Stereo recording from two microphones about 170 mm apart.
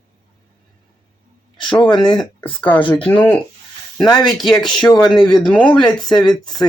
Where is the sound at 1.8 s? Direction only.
25° left (ahead or behind).